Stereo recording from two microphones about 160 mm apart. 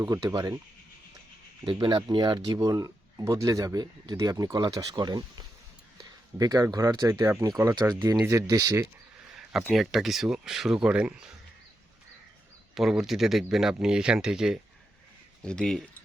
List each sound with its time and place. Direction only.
0.0 s speech: 20° right (ahead or behind)
1.6 s speech: 25° right (ahead or behind)
9.3 s speech: 5° right (ahead or behind)
12.7 s speech: 5° right (ahead or behind)